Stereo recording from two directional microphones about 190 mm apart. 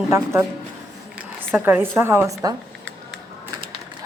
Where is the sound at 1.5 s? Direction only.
10° right (ahead or behind).